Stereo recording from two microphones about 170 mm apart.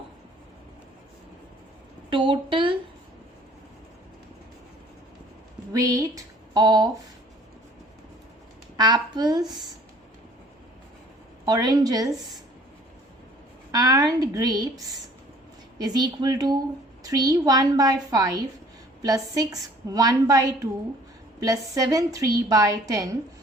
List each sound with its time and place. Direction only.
2.0 s a woman's voice: 30° right (ahead or behind)
5.7 s a sound: 20° right (ahead or behind)
8.8 s a woman's voice: 25° right (ahead or behind)
11.4 s a woman's voice: 20° right (ahead or behind)
13.7 s a woman's voice: 20° right (ahead or behind)
15.8 s a woman's voice: 25° right (ahead or behind)